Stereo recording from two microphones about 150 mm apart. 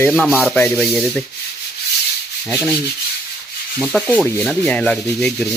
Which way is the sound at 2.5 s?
10° left (ahead or behind).